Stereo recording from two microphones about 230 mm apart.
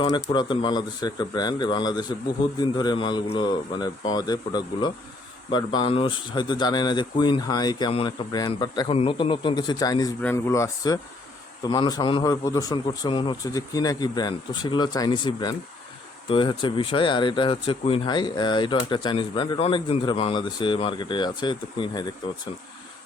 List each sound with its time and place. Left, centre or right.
0.0 s a man's voice: centre